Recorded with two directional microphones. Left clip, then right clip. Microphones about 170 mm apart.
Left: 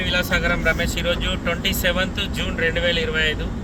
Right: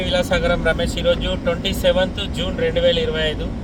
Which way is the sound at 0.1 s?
35° left (ahead or behind).